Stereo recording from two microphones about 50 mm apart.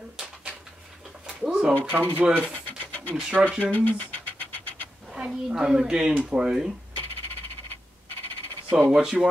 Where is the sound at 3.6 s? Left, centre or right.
Left.